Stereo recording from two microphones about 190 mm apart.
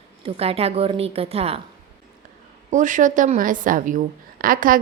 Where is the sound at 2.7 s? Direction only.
40° right (ahead or behind).